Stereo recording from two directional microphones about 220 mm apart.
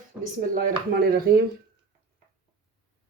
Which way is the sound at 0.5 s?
40° right (ahead or behind).